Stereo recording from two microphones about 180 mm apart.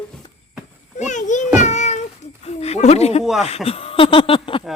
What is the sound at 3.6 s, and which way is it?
Speech, 30° left (ahead or behind).